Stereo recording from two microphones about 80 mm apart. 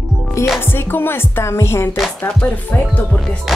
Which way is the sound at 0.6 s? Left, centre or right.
Left.